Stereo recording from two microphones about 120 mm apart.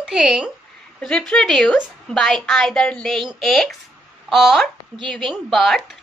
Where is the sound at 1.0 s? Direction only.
5° left (ahead or behind).